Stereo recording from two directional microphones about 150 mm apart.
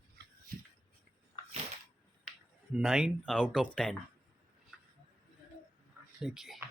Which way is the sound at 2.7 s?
5° right (ahead or behind).